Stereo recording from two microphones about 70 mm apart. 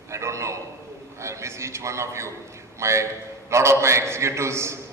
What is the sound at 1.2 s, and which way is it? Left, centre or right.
A man's voice, right.